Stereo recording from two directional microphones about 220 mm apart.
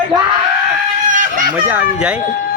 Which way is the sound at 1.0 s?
35° right (ahead or behind).